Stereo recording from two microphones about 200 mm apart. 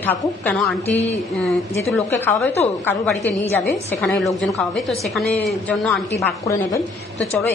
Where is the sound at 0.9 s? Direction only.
35° left (ahead or behind).